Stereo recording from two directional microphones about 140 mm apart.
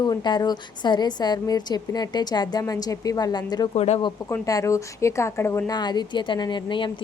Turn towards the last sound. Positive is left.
turn(degrees=35)  # may be behind; listen again after turning